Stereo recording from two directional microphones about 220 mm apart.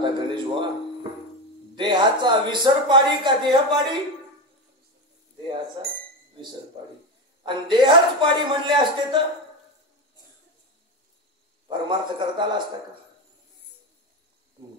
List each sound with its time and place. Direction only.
0.0 s a sound: 20° right (ahead or behind)
1.8 s speech: 20° right (ahead or behind)
7.4 s speech: 20° right (ahead or behind)
11.9 s speech: 20° right (ahead or behind)